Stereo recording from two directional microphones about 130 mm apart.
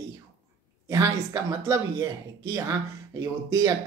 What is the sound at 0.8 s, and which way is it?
Speech, 25° right (ahead or behind).